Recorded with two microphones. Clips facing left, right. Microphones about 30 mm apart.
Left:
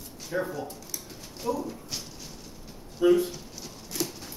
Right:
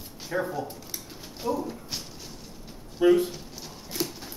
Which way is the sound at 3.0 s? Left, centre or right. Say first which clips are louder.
Right 1 dB; right.